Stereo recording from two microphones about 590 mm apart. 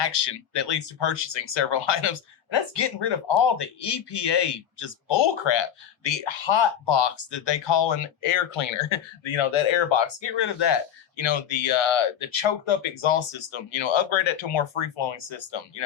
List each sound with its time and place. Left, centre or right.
0.0 s speech: left